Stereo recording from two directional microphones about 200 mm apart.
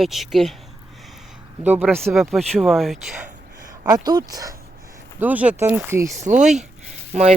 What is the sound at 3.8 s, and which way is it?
Speech, 20° right (ahead or behind).